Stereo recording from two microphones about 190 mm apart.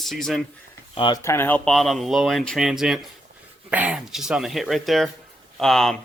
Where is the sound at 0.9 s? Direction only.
25° left (ahead or behind).